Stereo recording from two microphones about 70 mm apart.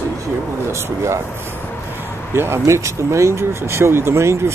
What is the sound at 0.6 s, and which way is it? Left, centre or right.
Speech, right.